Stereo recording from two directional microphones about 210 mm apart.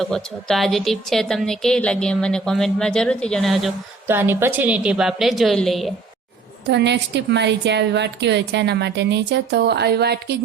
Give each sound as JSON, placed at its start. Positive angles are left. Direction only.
{"t": 0.0, "sound": "a woman's voice", "side_deg": 0}
{"t": 4.0, "sound": "a woman's voice", "side_deg": -10}
{"t": 6.7, "sound": "a woman's voice", "side_deg": -55}